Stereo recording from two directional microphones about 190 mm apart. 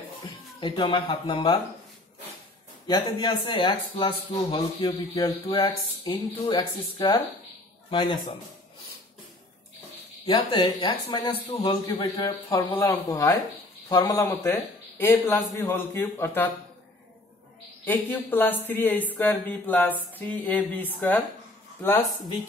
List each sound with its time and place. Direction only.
0.6 s speech: 25° left (ahead or behind)
2.9 s speech: 25° left (ahead or behind)
10.2 s speech: 25° left (ahead or behind)
12.5 s speech: 10° left (ahead or behind)
17.8 s speech: 10° left (ahead or behind)